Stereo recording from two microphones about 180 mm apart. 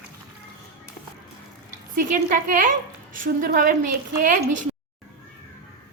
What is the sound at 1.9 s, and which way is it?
A woman's voice, 50° right (ahead or behind).